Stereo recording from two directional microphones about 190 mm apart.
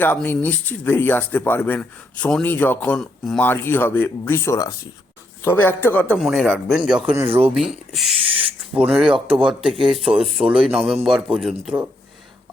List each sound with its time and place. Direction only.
0.0 s a man's voice: 10° left (ahead or behind)
7.1 s speech: 10° right (ahead or behind)
8.3 s owl: 30° right (ahead or behind)
8.9 s a man's voice: 5° right (ahead or behind)
9.1 s speech: 25° right (ahead or behind)
9.5 s a man's voice: centre (ahead or behind)